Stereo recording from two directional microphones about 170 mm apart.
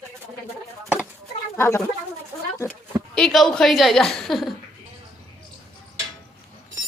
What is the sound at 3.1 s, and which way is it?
A woman's voice, centre (ahead or behind).